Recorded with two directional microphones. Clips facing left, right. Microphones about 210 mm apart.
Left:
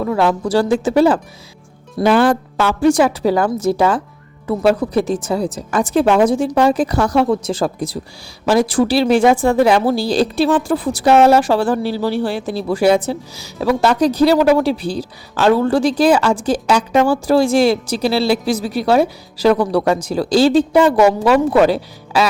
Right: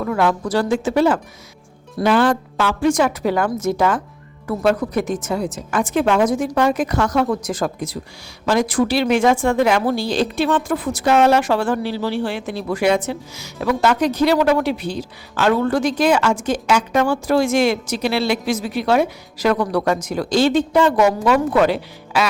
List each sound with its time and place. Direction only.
0.0 s speech: 25° left (ahead or behind)